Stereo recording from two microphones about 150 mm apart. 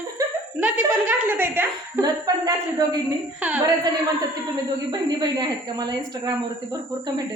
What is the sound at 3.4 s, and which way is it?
Speech, 10° right (ahead or behind).